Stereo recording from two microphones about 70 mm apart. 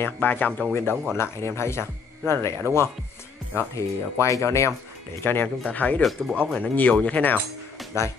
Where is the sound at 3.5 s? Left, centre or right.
Left.